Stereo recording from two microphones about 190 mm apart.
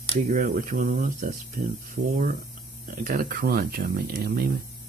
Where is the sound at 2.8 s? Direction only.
45° right (ahead or behind).